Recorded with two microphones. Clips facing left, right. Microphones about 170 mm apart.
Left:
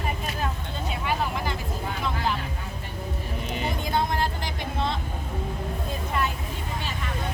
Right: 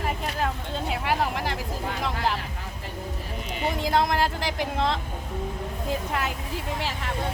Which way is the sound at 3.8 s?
90° right.